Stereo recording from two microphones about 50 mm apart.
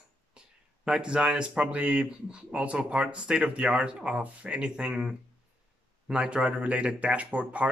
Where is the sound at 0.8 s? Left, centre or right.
Centre.